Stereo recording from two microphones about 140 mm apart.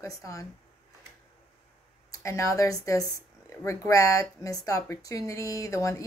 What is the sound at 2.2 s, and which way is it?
Speech, 20° left (ahead or behind).